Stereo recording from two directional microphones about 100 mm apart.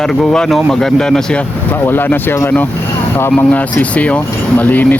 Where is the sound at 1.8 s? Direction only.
20° left (ahead or behind).